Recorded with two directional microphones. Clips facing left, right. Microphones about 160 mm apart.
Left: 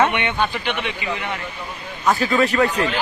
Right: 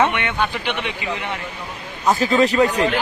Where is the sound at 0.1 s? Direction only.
5° left (ahead or behind).